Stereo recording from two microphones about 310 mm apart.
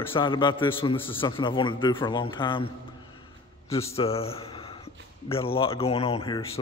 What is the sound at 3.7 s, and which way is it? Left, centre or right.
A man's voice, centre.